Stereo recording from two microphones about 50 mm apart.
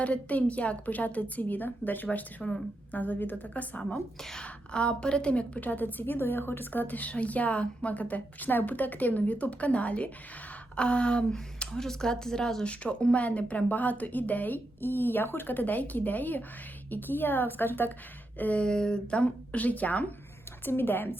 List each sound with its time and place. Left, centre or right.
0.0 s a woman's voice: left
2.0 s a woman's voice: left
3.9 s speech: centre
4.7 s a woman's voice: centre
12.6 s a woman's voice: left
18.6 s speech: centre
20.7 s a woman's voice: left